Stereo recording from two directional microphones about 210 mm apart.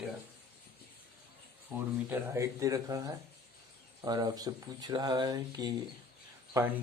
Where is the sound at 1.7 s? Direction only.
10° right (ahead or behind).